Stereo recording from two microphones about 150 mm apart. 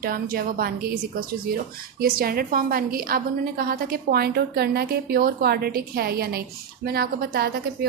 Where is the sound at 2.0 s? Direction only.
80° right.